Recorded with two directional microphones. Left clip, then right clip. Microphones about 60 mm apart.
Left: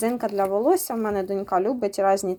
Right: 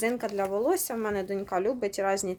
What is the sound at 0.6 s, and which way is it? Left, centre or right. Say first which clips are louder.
Speech: left 5 dB; left.